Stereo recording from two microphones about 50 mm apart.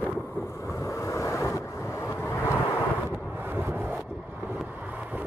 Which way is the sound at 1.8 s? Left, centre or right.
Left.